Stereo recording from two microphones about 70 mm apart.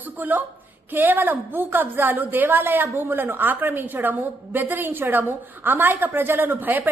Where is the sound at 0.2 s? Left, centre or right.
Right.